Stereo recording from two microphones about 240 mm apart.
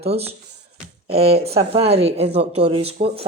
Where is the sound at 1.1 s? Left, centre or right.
Right.